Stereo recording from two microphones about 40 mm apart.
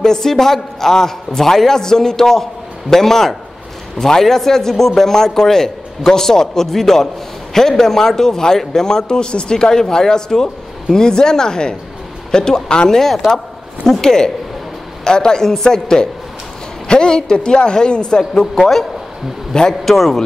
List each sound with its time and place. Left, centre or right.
0.0 s a man's voice: centre
18.3 s a man's voice: centre
19.8 s a man's voice: centre